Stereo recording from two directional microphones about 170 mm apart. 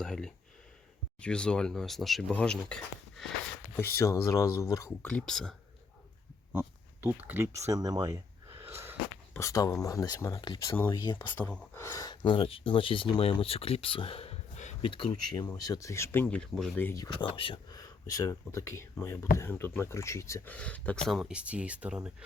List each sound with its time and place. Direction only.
0.0 s speech: 5° left (ahead or behind)
5.0 s speech: 5° left (ahead or behind)
6.5 s speech: 10° right (ahead or behind)
9.3 s speech: 20° left (ahead or behind)
11.2 s speech: 10° left (ahead or behind)
11.8 s speech: 20° left (ahead or behind); by 14.8 s 45° left (ahead or behind)
14.8 s speech: 30° left (ahead or behind); by 22.1 s 5° right (ahead or behind)